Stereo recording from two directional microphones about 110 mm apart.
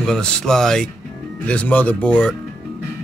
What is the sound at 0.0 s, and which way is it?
Speech, 5° left (ahead or behind).